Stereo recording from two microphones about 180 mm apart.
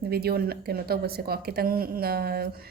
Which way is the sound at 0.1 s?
60° right (ahead or behind).